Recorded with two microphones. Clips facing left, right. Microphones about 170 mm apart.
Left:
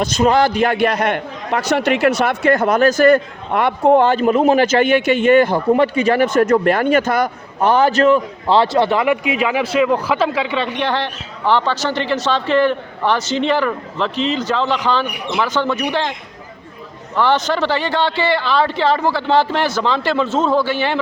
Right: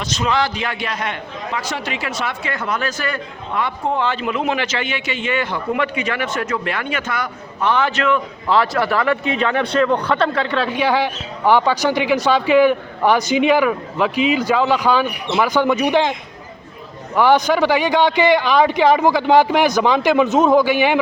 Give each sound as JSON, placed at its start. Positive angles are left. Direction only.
{"t": 0.0, "sound": "a man's voice", "side_deg": 50}
{"t": 2.4, "sound": "a man's voice", "side_deg": 45}
{"t": 3.6, "sound": "speech", "side_deg": 60}
{"t": 17.2, "sound": "speech", "side_deg": -10}